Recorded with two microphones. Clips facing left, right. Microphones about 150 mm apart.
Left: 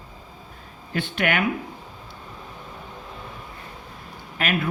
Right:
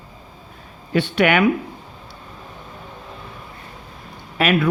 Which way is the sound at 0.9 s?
75° right (ahead or behind).